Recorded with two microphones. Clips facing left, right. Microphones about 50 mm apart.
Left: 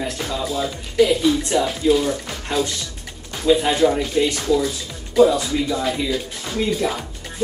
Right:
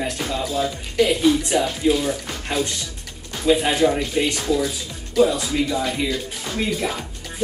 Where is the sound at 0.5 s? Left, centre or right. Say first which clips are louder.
Left 2 dB; centre.